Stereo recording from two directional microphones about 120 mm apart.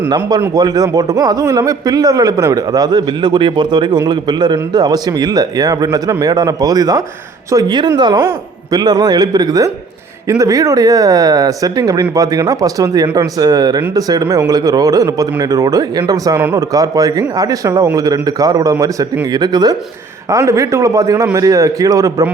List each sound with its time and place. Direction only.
0.1 s a man's voice: 35° right (ahead or behind)
16.4 s speech: 20° right (ahead or behind)
16.7 s a man's voice: 30° right (ahead or behind)